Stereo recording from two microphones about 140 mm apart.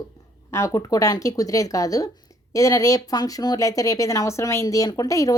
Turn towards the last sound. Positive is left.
turn(degrees=25)  # may be behind; listen again after turning